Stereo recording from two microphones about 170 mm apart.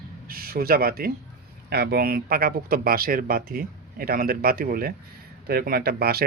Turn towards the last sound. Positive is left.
turn(degrees=-65)  # may be behind; listen again after turning